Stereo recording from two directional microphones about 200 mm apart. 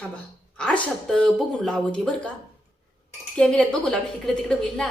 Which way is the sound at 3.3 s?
5° left (ahead or behind).